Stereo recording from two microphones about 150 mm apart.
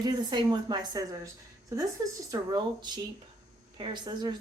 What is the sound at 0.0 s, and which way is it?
A woman's voice, 30° right (ahead or behind).